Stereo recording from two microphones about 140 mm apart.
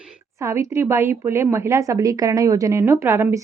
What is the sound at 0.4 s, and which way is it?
Speech, 20° right (ahead or behind).